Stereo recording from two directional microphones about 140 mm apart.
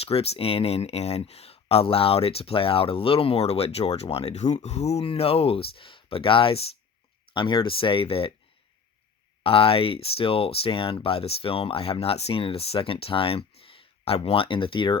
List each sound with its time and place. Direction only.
0.0 s speech: 45° left (ahead or behind)
9.4 s speech: 40° left (ahead or behind)